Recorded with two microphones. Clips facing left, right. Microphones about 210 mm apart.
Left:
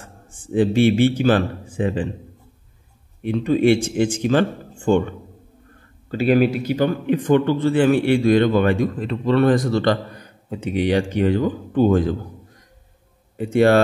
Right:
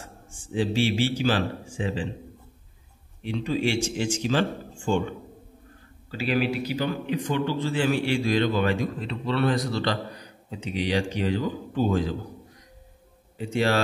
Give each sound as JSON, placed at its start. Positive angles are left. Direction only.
{"t": 0.4, "sound": "speech", "side_deg": 55}
{"t": 3.2, "sound": "a man's voice", "side_deg": 55}
{"t": 13.4, "sound": "speech", "side_deg": 55}